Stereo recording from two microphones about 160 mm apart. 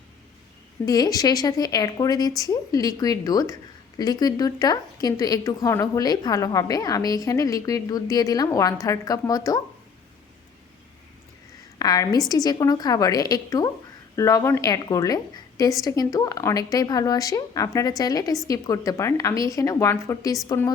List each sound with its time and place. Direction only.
0.9 s a woman's voice: 25° left (ahead or behind)
11.8 s a woman's voice: 25° left (ahead or behind)